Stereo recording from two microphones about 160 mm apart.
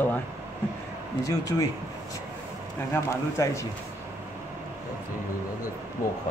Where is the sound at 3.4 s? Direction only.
20° left (ahead or behind).